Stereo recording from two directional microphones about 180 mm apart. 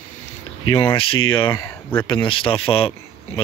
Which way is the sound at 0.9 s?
30° left (ahead or behind).